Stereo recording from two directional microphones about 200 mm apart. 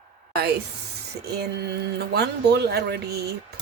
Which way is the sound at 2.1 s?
55° right (ahead or behind).